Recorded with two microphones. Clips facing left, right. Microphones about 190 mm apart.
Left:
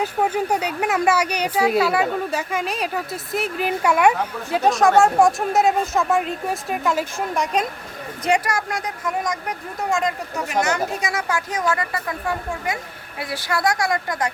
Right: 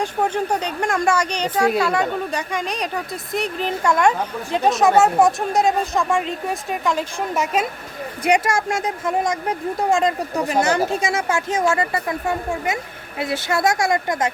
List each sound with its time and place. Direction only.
0.0 s speech: 5° left (ahead or behind)
8.4 s speech: 25° right (ahead or behind)